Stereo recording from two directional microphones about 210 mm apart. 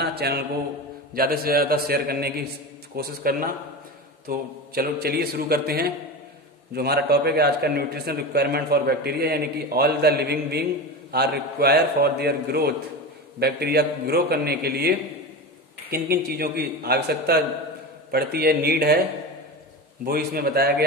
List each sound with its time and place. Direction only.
0.0 s mantra: 50° right (ahead or behind)
1.1 s a man's voice: 45° right (ahead or behind)
20.1 s a man's voice: 50° right (ahead or behind)